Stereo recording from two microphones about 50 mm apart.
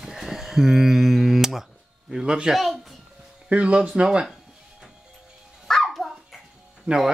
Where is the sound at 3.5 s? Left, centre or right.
Right.